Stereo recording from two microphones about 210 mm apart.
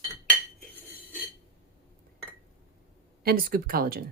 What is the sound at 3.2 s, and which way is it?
Speech, 45° right (ahead or behind).